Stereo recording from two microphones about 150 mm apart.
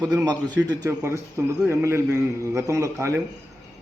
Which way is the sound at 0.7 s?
20° right (ahead or behind).